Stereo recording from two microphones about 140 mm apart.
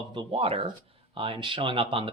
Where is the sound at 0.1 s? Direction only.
40° right (ahead or behind).